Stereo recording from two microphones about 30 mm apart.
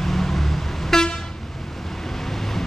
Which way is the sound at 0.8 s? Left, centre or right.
Centre.